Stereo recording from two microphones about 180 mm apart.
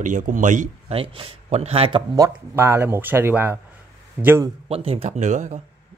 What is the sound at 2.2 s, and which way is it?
Speech, 15° right (ahead or behind).